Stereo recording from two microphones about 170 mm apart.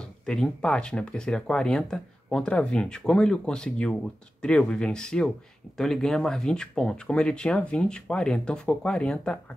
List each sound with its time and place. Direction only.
0.0 s speech: 5° left (ahead or behind)